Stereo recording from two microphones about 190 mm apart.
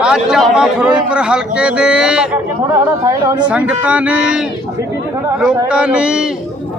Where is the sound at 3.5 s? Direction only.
5° right (ahead or behind).